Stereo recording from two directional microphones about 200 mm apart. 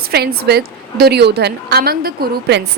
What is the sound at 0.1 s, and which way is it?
A woman's voice, 50° right (ahead or behind).